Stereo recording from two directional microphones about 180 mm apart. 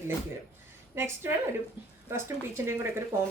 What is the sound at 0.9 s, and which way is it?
A woman's voice, 15° right (ahead or behind).